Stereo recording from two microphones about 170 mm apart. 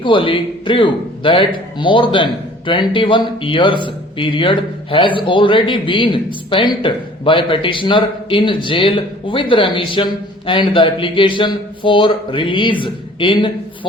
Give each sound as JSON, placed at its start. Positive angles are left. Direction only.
{"t": 0.0, "sound": "a man's voice", "side_deg": 30}